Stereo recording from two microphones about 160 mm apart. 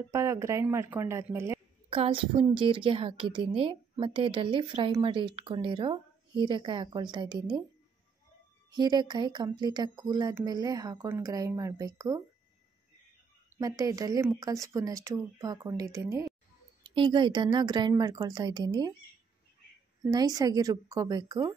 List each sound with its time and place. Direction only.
0.1 s speech: 20° right (ahead or behind)
1.9 s a woman's voice: 35° right (ahead or behind)
8.7 s speech: 25° right (ahead or behind)
13.6 s speech: 20° right (ahead or behind)
20.1 s speech: 25° right (ahead or behind)